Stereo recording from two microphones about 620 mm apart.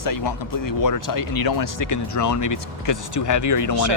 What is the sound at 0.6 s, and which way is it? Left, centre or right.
Speech, left.